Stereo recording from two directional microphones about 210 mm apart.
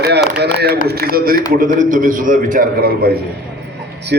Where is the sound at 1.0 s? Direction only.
45° right (ahead or behind).